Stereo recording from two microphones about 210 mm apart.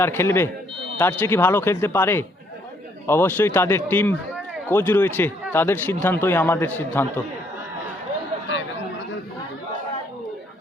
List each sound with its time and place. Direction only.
0.0 s a man's voice: 10° left (ahead or behind)